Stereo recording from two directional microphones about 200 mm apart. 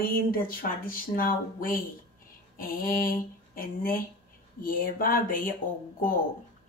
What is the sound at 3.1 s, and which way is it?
Speech, 45° left (ahead or behind).